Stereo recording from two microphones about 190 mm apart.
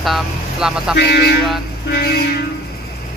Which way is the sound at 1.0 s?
60° left (ahead or behind).